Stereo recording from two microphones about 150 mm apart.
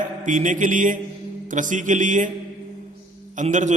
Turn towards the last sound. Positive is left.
turn(degrees=-55)  # may be behind; listen again after turning